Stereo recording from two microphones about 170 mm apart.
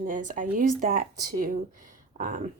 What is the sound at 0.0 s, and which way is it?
Speech, 50° right (ahead or behind).